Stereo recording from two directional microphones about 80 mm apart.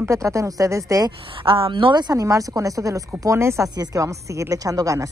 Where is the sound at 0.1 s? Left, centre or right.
Right.